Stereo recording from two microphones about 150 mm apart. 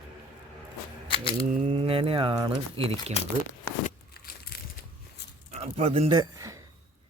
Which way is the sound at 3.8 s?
90° left.